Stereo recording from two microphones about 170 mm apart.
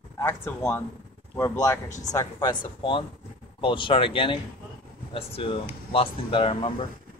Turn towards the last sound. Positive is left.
turn(degrees=30)  # may be behind; listen again after turning